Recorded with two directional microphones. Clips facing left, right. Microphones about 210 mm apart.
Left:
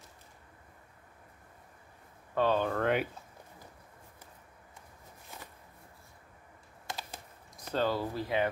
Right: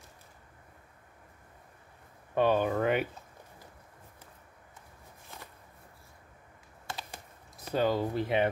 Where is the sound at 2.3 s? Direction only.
15° right (ahead or behind).